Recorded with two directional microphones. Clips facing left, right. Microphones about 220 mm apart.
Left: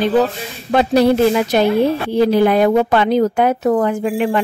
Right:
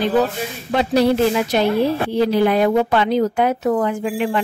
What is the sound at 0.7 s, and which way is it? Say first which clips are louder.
Speech: left 3 dB; 50° left (ahead or behind).